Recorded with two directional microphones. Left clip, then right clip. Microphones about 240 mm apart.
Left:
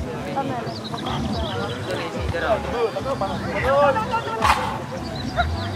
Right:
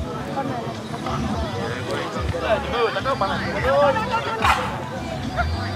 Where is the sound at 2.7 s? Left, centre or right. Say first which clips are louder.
Right 2 dB; centre.